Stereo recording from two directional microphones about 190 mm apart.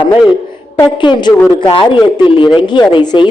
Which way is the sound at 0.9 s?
25° left (ahead or behind).